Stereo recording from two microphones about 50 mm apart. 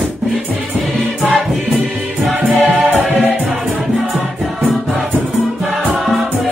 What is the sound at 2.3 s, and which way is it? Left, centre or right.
Music, right.